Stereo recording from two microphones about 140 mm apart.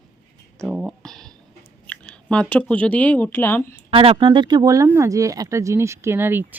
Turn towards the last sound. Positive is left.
turn(degrees=-15)  # may be behind; listen again after turning